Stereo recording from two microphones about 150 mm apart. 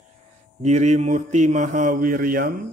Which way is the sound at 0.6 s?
50° right (ahead or behind).